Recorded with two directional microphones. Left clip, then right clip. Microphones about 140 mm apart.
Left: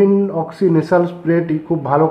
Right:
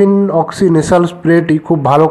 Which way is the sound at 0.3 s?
30° right (ahead or behind).